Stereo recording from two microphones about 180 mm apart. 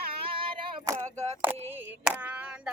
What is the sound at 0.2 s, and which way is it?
Child singing, 30° right (ahead or behind).